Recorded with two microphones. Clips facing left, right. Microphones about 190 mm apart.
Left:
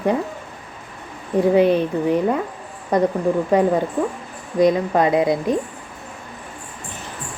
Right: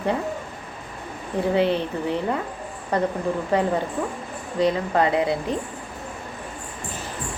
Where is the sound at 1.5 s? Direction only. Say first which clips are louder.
Left 5 dB; 15° left (ahead or behind).